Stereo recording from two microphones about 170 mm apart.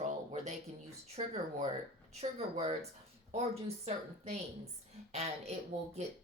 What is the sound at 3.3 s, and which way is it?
Speech, 40° right (ahead or behind).